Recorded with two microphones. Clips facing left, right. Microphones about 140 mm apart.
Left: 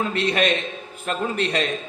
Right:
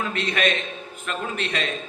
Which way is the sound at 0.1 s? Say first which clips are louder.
Left 3 dB; 35° left (ahead or behind).